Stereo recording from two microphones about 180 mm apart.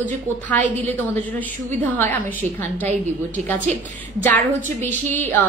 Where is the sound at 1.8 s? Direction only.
10° left (ahead or behind).